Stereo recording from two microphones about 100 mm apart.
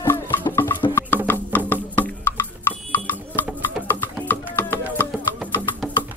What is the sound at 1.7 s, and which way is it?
Wood block, 20° left (ahead or behind).